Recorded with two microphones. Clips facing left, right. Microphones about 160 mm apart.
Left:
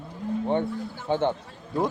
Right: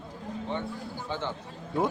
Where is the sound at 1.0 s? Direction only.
55° left (ahead or behind).